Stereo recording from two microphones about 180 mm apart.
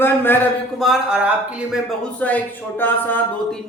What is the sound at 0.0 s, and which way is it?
Speech, 10° left (ahead or behind).